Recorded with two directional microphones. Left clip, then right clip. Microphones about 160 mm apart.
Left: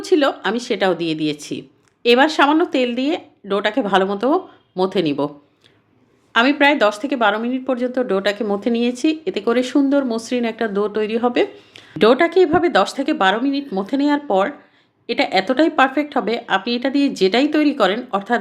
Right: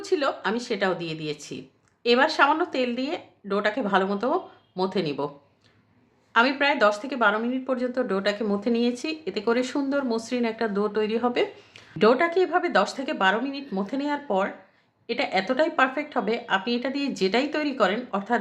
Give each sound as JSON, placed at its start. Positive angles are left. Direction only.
{"t": 0.0, "sound": "speech", "side_deg": 35}
{"t": 6.3, "sound": "speech", "side_deg": 30}